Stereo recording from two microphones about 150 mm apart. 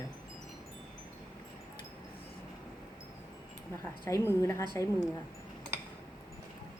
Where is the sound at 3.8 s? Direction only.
15° left (ahead or behind).